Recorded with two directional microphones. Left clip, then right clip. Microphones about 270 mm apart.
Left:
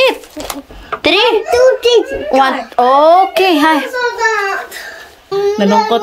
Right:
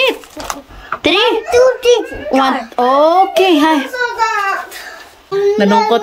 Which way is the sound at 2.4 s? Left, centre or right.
Centre.